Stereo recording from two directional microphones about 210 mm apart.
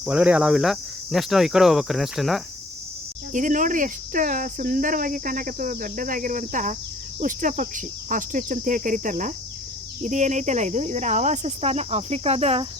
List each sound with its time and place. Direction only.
0.0 s speech: 5° right (ahead or behind)
3.3 s cricket: 40° right (ahead or behind)